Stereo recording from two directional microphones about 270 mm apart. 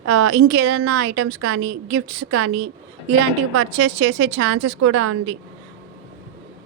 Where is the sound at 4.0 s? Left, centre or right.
Right.